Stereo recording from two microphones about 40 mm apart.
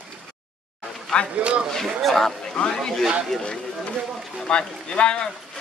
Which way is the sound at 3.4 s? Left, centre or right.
Left.